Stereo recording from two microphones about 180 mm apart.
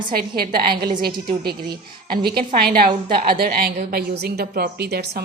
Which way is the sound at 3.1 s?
30° right (ahead or behind).